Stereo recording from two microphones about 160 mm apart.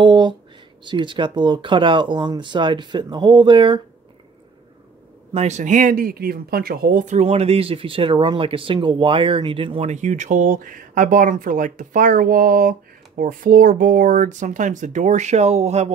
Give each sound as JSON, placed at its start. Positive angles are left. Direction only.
{"t": 0.0, "sound": "a sound", "side_deg": -30}
{"t": 0.8, "sound": "speech", "side_deg": -30}
{"t": 5.3, "sound": "speech", "side_deg": -45}